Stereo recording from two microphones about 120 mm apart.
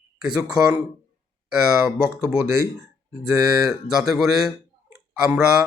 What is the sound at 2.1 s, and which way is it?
Speech, 25° right (ahead or behind).